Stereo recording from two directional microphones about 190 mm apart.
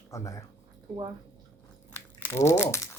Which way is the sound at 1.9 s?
15° left (ahead or behind).